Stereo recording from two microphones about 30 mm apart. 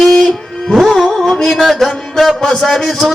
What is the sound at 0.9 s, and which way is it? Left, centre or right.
Music, centre.